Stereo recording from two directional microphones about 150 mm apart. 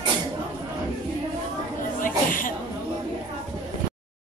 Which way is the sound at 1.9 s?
65° left (ahead or behind).